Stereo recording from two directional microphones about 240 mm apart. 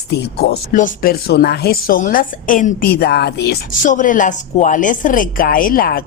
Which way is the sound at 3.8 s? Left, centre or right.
Left.